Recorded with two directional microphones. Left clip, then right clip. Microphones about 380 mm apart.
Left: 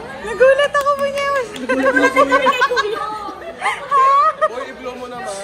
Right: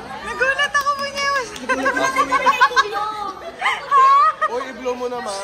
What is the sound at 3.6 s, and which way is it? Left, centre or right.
Bow-wow, centre.